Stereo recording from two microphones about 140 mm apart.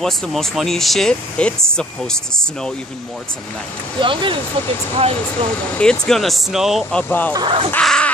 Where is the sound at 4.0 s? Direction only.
35° right (ahead or behind).